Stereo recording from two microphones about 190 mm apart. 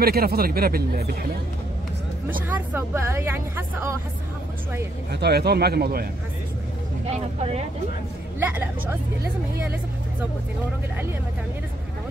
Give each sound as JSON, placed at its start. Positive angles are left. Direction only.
{"t": 0.0, "sound": "speech", "side_deg": -55}
{"t": 2.5, "sound": "speech", "side_deg": -10}
{"t": 5.1, "sound": "a man's voice", "side_deg": -60}
{"t": 7.1, "sound": "speech", "side_deg": -35}
{"t": 8.4, "sound": "speech", "side_deg": -10}